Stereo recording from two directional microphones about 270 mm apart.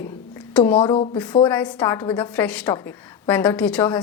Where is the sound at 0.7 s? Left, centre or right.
Centre.